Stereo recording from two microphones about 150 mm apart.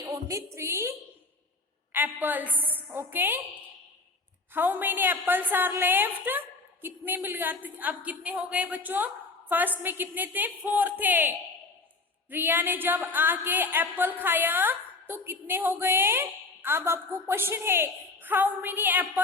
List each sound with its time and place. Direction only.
0.1 s a woman's voice: 20° right (ahead or behind)
4.5 s a woman's voice: 15° right (ahead or behind)